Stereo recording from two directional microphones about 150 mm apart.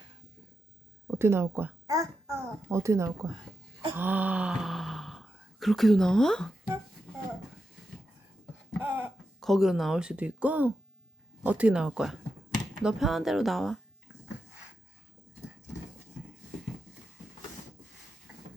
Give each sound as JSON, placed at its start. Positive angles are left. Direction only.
{"t": 1.0, "sound": "a child's voice", "side_deg": -15}
{"t": 8.8, "sound": "a sound", "side_deg": -10}
{"t": 9.4, "sound": "speech", "side_deg": 0}